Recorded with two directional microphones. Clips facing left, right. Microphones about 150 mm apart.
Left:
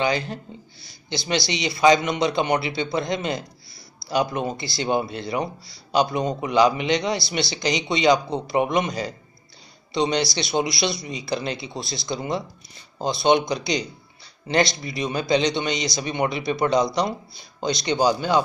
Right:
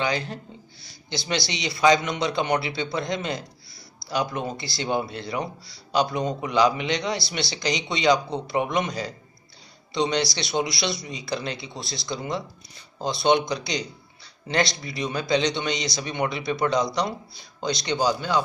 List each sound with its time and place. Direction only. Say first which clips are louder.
0.0 s speech: left 3 dB; 5° left (ahead or behind)